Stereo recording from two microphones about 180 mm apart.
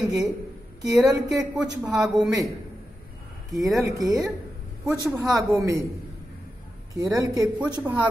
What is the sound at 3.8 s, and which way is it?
A woman's voice, 20° right (ahead or behind).